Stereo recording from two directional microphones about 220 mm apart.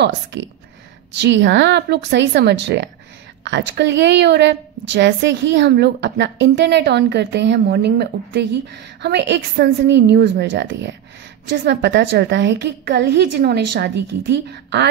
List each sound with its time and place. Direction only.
0.0 s a woman's voice: 55° right (ahead or behind)